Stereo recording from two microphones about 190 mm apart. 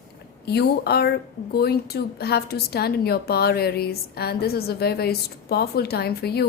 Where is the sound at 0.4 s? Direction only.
60° left (ahead or behind).